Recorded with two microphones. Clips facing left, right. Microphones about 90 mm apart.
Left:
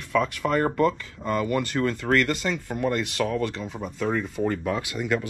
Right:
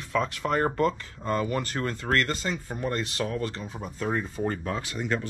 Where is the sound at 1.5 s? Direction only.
5° right (ahead or behind).